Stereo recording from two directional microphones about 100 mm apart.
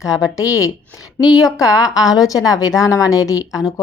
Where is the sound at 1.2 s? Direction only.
5° right (ahead or behind).